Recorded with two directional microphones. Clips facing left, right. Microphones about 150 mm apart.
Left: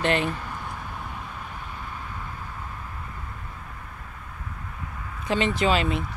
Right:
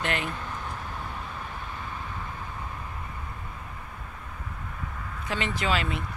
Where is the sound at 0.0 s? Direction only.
30° left (ahead or behind).